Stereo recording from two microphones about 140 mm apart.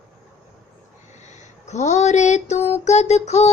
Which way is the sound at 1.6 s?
55° left (ahead or behind).